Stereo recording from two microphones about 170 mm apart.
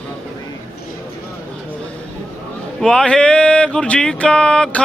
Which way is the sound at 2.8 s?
5° left (ahead or behind).